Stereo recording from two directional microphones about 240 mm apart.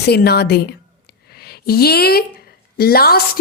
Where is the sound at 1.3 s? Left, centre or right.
Left.